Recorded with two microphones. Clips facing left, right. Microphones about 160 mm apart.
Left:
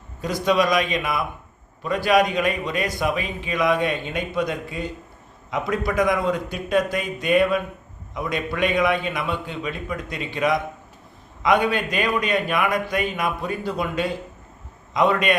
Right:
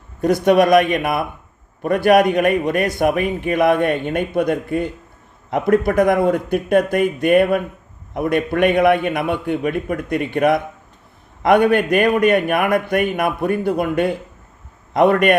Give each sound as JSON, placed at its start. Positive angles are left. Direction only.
{"t": 0.2, "sound": "a man's voice", "side_deg": -60}